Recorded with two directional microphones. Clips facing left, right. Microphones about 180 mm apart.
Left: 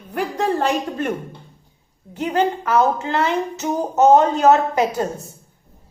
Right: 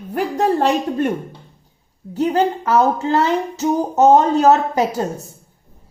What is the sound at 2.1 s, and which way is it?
A woman's voice, 35° right (ahead or behind).